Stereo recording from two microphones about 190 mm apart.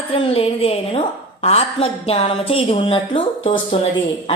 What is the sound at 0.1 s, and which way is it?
A woman's voice, 30° left (ahead or behind).